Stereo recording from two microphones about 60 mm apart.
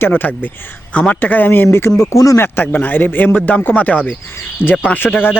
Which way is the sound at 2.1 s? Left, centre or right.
Left.